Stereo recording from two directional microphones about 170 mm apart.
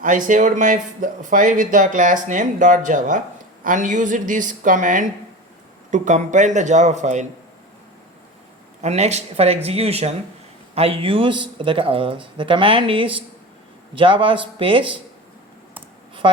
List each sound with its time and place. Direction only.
0.0 s speech: 50° right (ahead or behind)
8.8 s speech: 40° right (ahead or behind)